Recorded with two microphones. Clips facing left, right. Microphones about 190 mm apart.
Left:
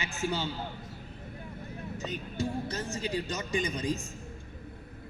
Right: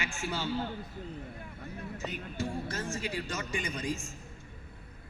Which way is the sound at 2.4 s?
20° left (ahead or behind).